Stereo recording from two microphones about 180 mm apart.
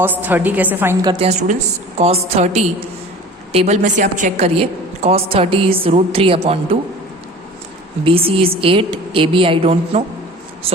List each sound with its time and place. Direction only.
0.0 s a woman's voice: 10° right (ahead or behind)
1.0 s a woman's voice: 35° right (ahead or behind)
8.0 s a woman's voice: 30° right (ahead or behind)